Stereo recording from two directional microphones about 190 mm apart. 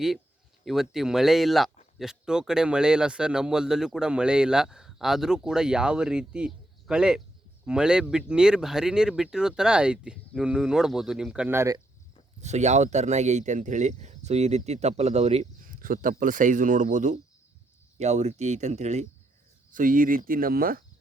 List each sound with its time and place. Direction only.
0.6 s a man's voice: centre (ahead or behind)
12.4 s speech: 35° right (ahead or behind)
15.6 s speech: 45° right (ahead or behind)